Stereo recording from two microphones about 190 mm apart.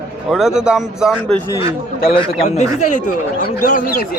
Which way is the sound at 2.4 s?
40° left (ahead or behind).